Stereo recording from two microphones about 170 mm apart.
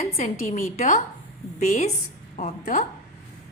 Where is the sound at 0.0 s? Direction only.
40° left (ahead or behind).